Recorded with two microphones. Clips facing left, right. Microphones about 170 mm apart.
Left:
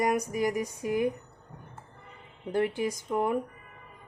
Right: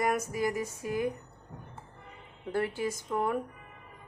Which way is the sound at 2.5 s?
20° left (ahead or behind).